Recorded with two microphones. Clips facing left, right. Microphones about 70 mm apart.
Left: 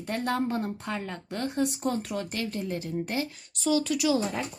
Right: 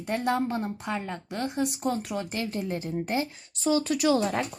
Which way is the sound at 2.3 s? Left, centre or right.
Right.